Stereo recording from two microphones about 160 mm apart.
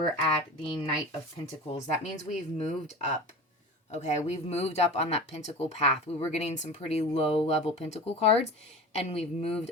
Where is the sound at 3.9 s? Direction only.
45° left (ahead or behind).